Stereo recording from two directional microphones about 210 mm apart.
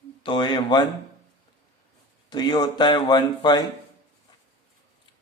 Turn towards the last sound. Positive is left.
turn(degrees=20)  # may be behind; listen again after turning